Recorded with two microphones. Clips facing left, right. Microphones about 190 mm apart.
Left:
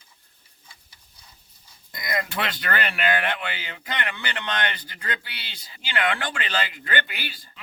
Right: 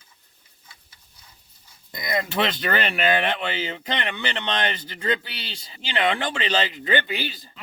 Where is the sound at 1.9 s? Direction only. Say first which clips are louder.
Right 3 dB; 25° right (ahead or behind).